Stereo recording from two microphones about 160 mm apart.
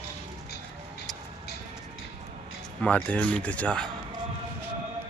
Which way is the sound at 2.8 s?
5° left (ahead or behind).